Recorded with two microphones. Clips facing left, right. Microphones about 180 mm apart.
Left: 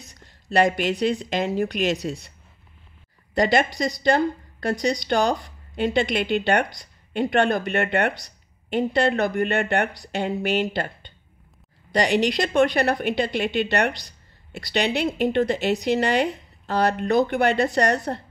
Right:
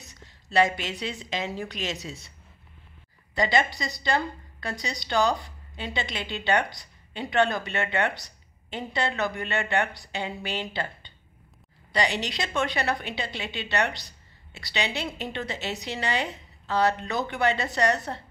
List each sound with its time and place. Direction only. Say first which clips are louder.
0.6 s a woman's voice: left 5 dB; 55° left (ahead or behind)
3.3 s a woman's voice: left 5 dB; 50° left (ahead or behind)
10.7 s a woman's voice: left 5 dB; 50° left (ahead or behind)